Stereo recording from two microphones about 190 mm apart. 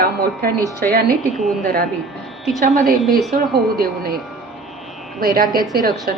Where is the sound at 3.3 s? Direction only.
50° right (ahead or behind).